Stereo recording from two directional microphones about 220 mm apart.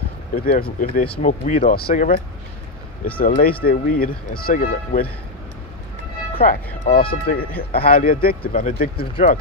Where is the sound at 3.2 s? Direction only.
40° left (ahead or behind).